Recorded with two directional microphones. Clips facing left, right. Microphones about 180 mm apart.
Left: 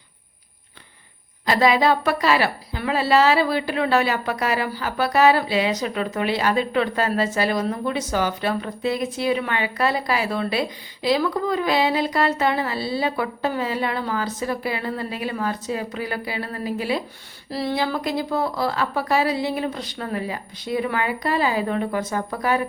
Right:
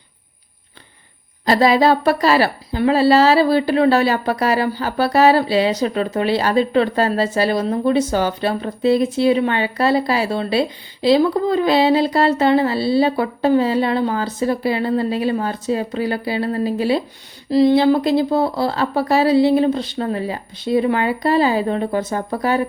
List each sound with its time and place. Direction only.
1.5 s a woman's voice: 35° right (ahead or behind)
17.5 s speech: 20° right (ahead or behind)